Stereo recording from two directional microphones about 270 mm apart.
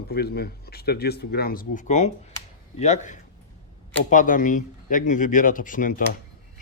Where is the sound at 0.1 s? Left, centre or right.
Left.